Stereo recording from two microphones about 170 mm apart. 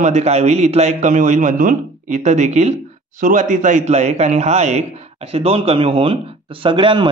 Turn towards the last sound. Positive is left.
turn(degrees=-30)  # may be behind; listen again after turning